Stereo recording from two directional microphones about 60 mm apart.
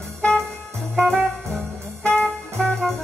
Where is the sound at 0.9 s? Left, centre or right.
Centre.